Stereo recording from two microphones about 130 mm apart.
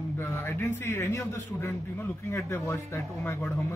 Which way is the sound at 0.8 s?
20° left (ahead or behind).